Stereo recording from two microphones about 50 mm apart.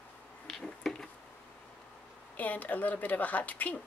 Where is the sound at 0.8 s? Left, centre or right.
Centre.